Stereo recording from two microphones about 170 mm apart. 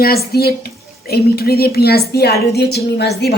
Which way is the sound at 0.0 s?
65° left (ahead or behind).